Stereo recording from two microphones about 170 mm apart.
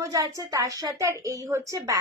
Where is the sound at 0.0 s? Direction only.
20° right (ahead or behind).